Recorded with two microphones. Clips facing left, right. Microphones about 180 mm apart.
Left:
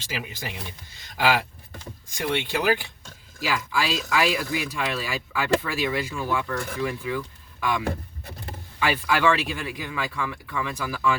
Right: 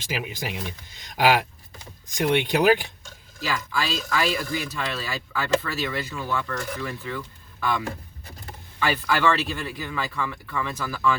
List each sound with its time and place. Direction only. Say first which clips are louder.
0.1 s speech: right 3 dB; 20° right (ahead or behind)
3.4 s speech: left 2 dB; 10° left (ahead or behind)
8.8 s speech: even; 10° left (ahead or behind)